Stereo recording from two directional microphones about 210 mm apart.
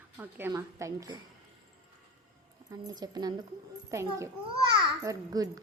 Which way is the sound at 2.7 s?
20° right (ahead or behind).